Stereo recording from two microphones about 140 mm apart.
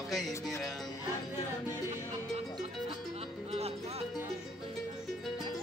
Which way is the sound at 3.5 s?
45° right (ahead or behind).